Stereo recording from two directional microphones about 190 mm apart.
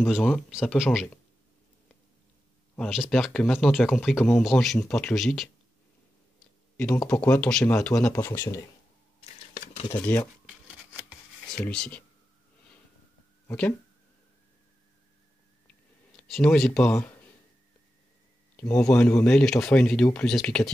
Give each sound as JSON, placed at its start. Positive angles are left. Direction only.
{"t": 0.0, "sound": "speech", "side_deg": 0}
{"t": 2.7, "sound": "speech", "side_deg": 0}
{"t": 6.8, "sound": "speech", "side_deg": 5}
{"t": 9.2, "sound": "a sound", "side_deg": 30}
{"t": 11.0, "sound": "rub", "side_deg": 0}
{"t": 13.5, "sound": "speech", "side_deg": 10}
{"t": 16.2, "sound": "speech", "side_deg": 5}
{"t": 18.6, "sound": "speech", "side_deg": 5}